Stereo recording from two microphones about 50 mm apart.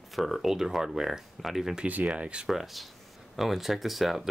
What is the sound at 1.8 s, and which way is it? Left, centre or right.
Speech, right.